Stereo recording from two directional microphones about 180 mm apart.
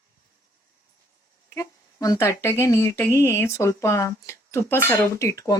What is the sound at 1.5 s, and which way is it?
Speech, 20° left (ahead or behind).